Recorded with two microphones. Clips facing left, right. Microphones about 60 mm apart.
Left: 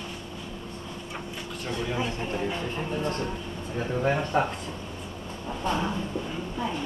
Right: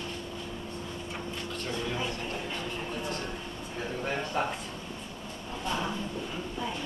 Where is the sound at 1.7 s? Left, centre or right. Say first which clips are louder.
Left 4 dB; centre; by 4.4 s left.